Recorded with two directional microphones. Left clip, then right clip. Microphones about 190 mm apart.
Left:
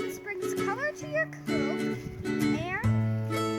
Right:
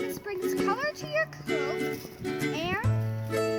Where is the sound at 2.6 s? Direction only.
10° left (ahead or behind).